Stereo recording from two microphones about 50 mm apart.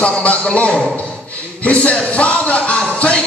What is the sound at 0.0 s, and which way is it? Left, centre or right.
Speech, left.